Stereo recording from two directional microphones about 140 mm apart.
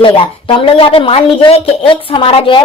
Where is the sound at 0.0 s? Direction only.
40° left (ahead or behind).